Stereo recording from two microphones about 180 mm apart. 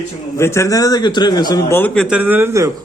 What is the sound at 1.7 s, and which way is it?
Speech, 5° left (ahead or behind).